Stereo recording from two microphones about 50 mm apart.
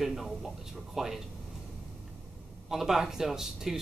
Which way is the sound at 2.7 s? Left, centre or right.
Centre.